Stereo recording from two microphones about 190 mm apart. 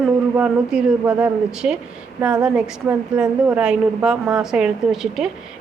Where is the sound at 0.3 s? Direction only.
5° right (ahead or behind).